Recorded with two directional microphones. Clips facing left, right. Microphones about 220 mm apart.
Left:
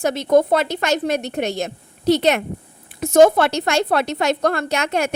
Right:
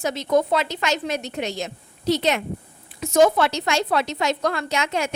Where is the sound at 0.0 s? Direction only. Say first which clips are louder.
Left 5 dB; 55° left (ahead or behind).